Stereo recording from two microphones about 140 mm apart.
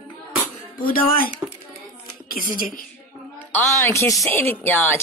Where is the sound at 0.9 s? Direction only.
90° left.